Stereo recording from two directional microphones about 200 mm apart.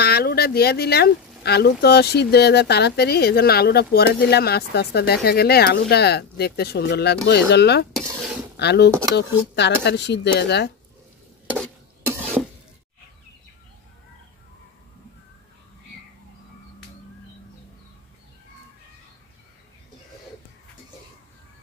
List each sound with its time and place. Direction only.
0.0 s speech: 50° left (ahead or behind)
7.9 s dishes: centre (ahead or behind)
8.5 s speech: 55° left (ahead or behind)